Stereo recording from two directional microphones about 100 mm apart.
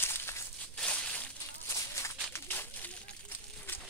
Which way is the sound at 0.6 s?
10° left (ahead or behind).